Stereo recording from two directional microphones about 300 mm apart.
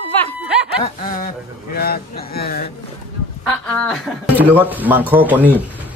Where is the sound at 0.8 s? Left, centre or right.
Left.